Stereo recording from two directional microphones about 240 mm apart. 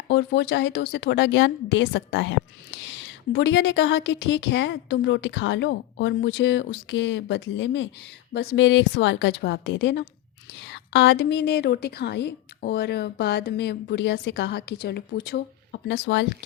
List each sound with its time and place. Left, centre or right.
0.1 s a woman's voice: left